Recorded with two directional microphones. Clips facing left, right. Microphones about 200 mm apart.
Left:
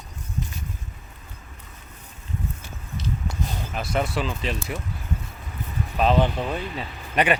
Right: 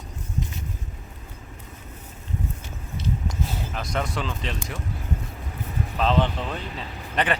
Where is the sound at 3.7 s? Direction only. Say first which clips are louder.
Left 4 dB; 5° left (ahead or behind).